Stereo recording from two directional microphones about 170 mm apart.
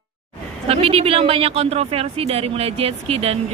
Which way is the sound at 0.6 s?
35° right (ahead or behind).